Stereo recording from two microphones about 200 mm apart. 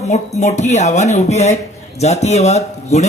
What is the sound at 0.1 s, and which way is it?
Speech, 35° left (ahead or behind).